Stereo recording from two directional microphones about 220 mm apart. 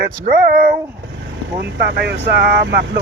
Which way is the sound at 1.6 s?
50° right (ahead or behind).